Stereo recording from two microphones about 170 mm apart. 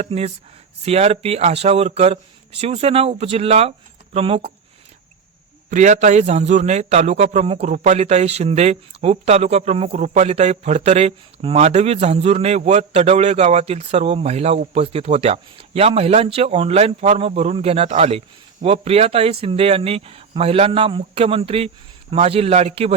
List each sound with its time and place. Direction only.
0.0 s a man's voice: 40° right (ahead or behind)
5.7 s a man's voice: 45° right (ahead or behind)